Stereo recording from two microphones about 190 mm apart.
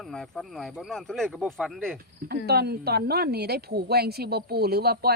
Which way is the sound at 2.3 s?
55° right (ahead or behind).